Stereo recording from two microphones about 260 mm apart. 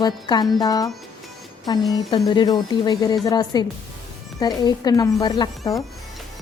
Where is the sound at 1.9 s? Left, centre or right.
Centre.